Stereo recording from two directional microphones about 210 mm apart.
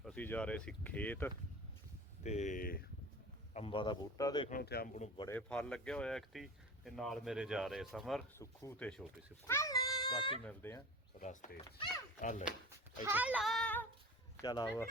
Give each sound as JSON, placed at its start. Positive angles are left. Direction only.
{"t": 0.0, "sound": "speech", "side_deg": 5}
{"t": 2.2, "sound": "speech", "side_deg": 35}
{"t": 3.5, "sound": "a man's voice", "side_deg": 25}
{"t": 4.4, "sound": "speech", "side_deg": 45}
{"t": 5.3, "sound": "speech", "side_deg": 5}
{"t": 8.4, "sound": "speech", "side_deg": 10}
{"t": 9.5, "sound": "a sound", "side_deg": 15}
{"t": 10.4, "sound": "speech", "side_deg": 10}
{"t": 11.2, "sound": "speech", "side_deg": 35}
{"t": 11.6, "sound": "speech", "side_deg": 15}
{"t": 12.2, "sound": "speech", "side_deg": 35}
{"t": 13.1, "sound": "speech", "side_deg": -5}
{"t": 14.4, "sound": "speech", "side_deg": 20}